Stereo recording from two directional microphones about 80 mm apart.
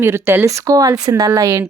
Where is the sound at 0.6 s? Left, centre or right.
Right.